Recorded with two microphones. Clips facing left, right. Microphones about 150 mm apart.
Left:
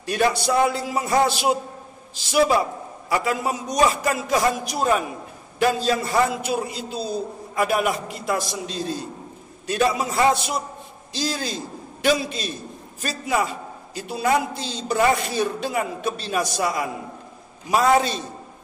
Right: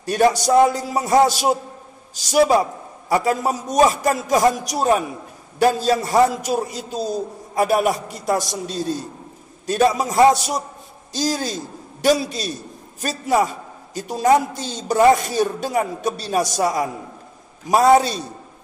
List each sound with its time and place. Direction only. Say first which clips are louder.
0.0 s speech: right 4 dB; 40° right (ahead or behind)